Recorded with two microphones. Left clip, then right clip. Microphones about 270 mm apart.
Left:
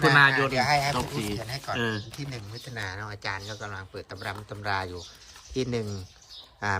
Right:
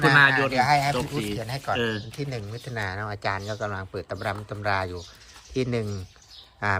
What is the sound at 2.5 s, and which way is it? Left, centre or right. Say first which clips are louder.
Speech: right 4 dB; centre.